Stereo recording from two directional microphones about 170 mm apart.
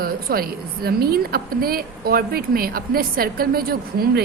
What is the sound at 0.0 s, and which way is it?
A woman's voice, 60° right (ahead or behind).